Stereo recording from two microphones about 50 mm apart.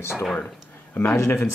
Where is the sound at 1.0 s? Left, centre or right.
Left.